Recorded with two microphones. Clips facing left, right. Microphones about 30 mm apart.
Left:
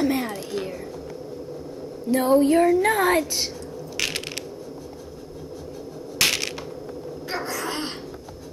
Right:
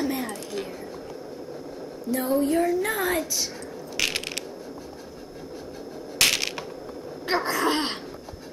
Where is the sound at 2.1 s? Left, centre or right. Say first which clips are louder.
Left 5 dB; left.